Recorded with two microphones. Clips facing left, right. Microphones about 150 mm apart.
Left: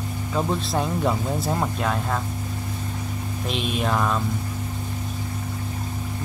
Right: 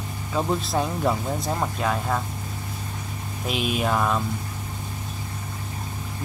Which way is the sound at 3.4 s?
5° right (ahead or behind).